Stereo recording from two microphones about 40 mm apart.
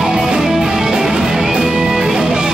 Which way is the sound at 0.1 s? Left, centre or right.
Centre.